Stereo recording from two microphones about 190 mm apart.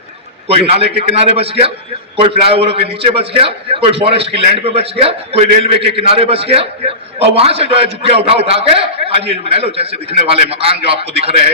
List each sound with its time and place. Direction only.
0.7 s a man's voice: 35° right (ahead or behind)